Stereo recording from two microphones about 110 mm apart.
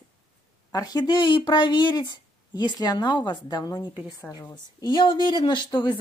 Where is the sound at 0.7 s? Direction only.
35° left (ahead or behind).